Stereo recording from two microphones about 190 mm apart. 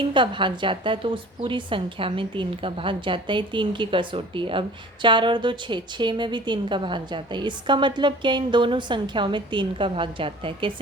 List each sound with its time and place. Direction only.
0.0 s a woman's voice: 25° right (ahead or behind)